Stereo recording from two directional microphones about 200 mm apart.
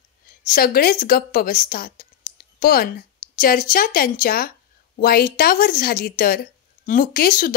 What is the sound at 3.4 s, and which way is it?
A woman's voice, 45° left (ahead or behind).